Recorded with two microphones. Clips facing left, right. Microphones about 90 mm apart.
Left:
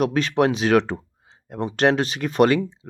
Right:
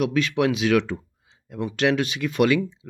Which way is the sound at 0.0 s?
40° left (ahead or behind).